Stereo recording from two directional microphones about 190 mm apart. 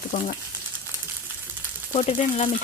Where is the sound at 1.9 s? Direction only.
35° left (ahead or behind).